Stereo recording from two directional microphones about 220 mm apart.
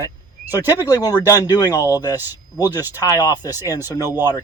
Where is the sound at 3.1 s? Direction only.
15° left (ahead or behind).